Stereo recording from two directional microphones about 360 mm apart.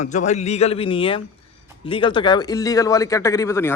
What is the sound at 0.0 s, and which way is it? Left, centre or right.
Speech, centre.